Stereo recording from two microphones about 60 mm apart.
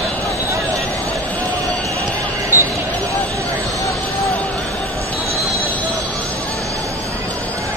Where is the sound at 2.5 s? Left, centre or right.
Right.